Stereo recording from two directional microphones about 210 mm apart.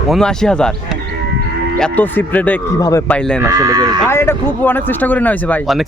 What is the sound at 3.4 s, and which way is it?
Speech, 15° right (ahead or behind).